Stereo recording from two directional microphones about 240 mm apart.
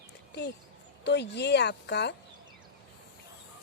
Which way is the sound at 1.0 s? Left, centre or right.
Left.